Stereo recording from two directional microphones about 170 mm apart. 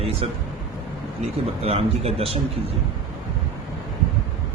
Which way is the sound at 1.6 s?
35° right (ahead or behind).